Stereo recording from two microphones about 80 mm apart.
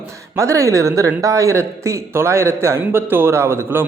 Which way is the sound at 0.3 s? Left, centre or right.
Right.